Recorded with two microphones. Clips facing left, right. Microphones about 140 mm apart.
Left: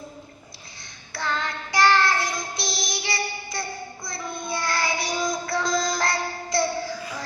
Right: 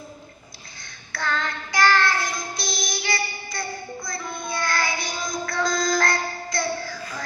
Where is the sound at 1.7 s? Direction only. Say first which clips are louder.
Left 1 dB; 30° left (ahead or behind).